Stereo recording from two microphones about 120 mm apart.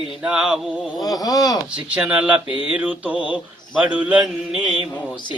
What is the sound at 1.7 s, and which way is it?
Speech, 10° right (ahead or behind).